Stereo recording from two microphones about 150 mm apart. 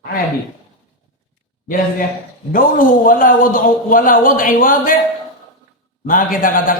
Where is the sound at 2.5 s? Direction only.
65° left (ahead or behind).